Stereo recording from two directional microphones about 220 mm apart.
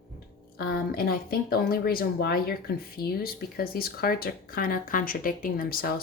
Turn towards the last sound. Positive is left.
turn(degrees=40)  # may be behind; listen again after turning